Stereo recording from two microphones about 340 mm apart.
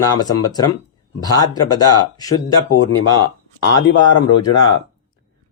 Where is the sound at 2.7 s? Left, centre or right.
Left.